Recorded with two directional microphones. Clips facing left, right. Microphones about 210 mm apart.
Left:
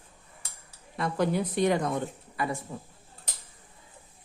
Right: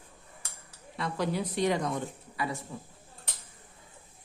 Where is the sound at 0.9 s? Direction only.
50° left (ahead or behind).